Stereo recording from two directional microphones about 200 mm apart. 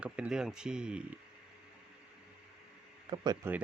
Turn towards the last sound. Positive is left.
turn(degrees=-20)  # may be behind; listen again after turning